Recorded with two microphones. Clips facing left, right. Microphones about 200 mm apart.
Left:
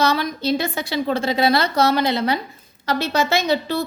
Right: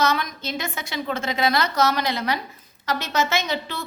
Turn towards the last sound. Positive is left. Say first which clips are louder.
# left 6 dB
turn(degrees=35)  # may be behind; listen again after turning